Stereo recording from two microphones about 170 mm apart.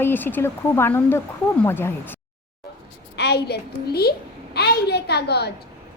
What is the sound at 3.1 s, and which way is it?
A woman's voice, 75° left (ahead or behind).